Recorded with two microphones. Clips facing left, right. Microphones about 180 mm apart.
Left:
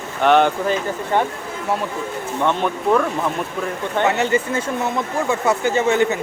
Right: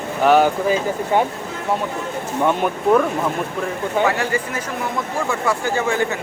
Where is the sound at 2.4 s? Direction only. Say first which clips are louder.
Right 1 dB; 10° right (ahead or behind).